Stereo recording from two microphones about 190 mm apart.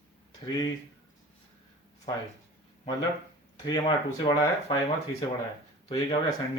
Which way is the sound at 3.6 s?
25° left (ahead or behind).